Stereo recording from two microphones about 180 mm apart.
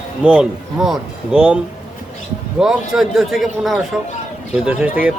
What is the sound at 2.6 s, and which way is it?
A man's voice, centre (ahead or behind).